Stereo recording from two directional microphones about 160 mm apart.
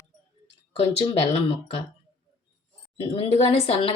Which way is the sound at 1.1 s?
35° left (ahead or behind).